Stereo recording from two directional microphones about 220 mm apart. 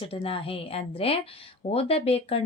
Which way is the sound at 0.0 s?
25° left (ahead or behind).